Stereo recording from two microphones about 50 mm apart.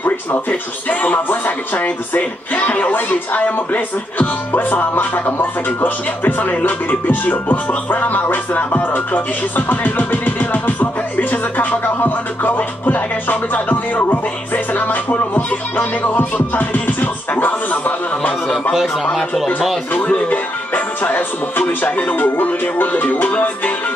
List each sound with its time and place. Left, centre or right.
0.5 s speech: left
19.9 s speech: left